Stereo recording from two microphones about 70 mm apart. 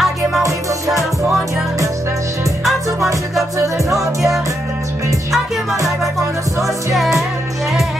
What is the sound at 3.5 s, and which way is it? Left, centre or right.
Music, right.